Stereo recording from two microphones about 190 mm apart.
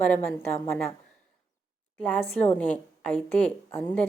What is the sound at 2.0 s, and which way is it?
A woman's voice, 10° left (ahead or behind).